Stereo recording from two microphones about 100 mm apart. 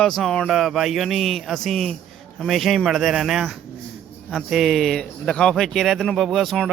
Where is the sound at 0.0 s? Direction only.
Centre (ahead or behind).